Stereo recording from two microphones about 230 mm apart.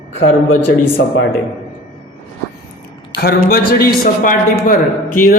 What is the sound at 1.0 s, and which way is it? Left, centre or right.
Speech, left.